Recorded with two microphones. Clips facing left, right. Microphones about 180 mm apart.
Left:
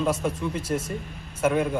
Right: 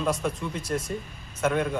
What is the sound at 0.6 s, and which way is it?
Speech, 25° left (ahead or behind).